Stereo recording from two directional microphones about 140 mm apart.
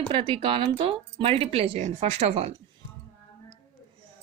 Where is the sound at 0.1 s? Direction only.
40° right (ahead or behind).